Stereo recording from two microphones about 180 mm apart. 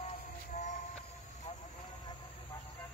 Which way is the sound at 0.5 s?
40° left (ahead or behind).